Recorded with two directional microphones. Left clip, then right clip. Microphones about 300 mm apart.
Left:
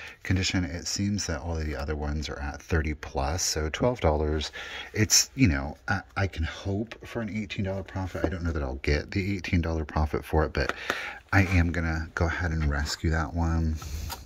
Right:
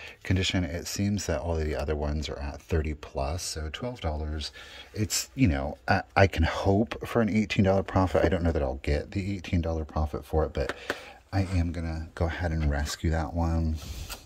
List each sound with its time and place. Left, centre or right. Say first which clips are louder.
0.3 s speech: even; centre
5.2 s speech: left 2 dB; centre